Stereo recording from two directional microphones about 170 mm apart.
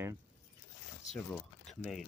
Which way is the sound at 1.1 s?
5° left (ahead or behind).